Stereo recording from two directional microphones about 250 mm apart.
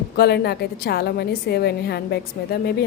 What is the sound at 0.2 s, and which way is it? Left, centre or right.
A woman's voice, left.